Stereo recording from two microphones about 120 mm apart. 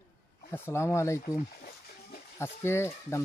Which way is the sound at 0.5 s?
20° left (ahead or behind).